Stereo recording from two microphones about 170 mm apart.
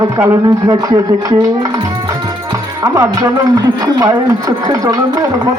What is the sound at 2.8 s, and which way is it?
Speech, 20° right (ahead or behind).